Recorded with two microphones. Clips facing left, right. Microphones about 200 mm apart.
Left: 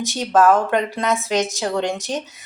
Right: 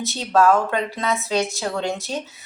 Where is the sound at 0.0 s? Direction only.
15° left (ahead or behind).